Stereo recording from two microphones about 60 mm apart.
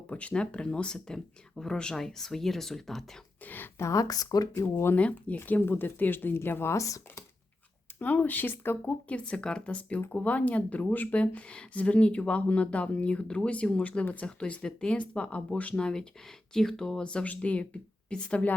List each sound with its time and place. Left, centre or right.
0.1 s speech: left; by 3.0 s centre
3.4 s speech: left
3.8 s speech: left
4.5 s speech: left
4.9 s speech: left
6.7 s speech: left
7.9 s speech: left
9.0 s speech: left